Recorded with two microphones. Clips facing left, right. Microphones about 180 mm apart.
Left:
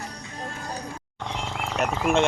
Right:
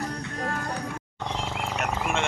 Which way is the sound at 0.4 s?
70° right (ahead or behind).